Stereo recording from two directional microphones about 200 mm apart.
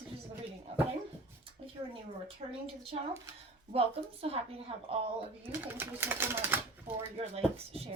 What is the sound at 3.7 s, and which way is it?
Speech, 30° right (ahead or behind).